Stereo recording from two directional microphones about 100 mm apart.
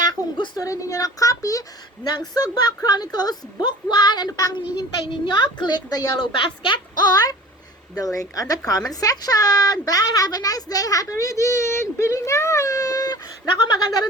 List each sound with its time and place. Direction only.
0.3 s speech: 50° left (ahead or behind)
0.6 s a child's voice: 35° left (ahead or behind)
4.8 s a child's voice: 50° left (ahead or behind)